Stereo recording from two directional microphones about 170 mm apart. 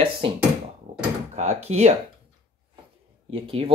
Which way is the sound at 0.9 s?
45° right (ahead or behind).